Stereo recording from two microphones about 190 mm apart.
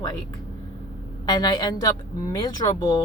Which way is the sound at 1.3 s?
20° left (ahead or behind).